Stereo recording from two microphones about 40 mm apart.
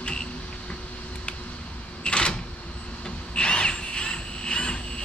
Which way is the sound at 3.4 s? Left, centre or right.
Left.